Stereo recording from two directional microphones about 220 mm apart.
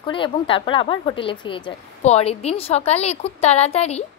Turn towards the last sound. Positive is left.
turn(degrees=30)  # may be behind; listen again after turning